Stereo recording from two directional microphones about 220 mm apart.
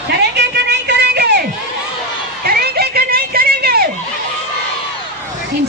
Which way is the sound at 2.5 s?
45° right (ahead or behind).